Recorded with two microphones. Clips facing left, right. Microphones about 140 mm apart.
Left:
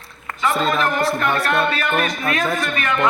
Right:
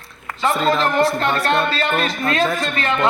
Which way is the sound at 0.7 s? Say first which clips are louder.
Right 2 dB; 25° right (ahead or behind).